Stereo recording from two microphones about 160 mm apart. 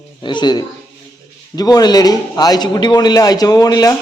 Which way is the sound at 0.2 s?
30° left (ahead or behind).